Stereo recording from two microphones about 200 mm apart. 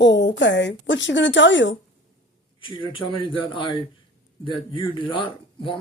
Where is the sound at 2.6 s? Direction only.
25° left (ahead or behind).